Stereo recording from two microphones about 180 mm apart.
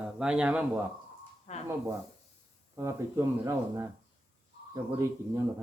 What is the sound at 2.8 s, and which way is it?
Speech, 15° right (ahead or behind).